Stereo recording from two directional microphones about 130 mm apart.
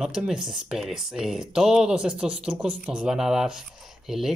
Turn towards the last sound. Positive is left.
turn(degrees=-5)  # may be behind; listen again after turning